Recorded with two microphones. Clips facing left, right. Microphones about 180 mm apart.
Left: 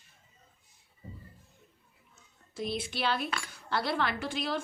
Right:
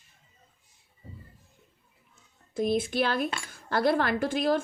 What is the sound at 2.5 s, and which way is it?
A woman's voice, 50° right (ahead or behind).